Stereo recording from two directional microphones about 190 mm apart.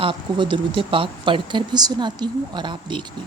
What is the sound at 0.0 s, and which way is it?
Speech, 25° right (ahead or behind).